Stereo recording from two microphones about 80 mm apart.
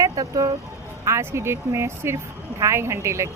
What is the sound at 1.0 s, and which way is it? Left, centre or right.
Speech, right.